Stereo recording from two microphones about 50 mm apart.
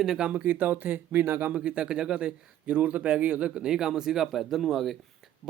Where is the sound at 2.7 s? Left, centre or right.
Right; by 4.9 s centre.